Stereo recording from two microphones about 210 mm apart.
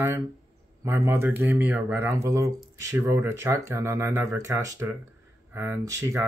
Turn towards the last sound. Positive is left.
turn(degrees=-15)  # may be behind; listen again after turning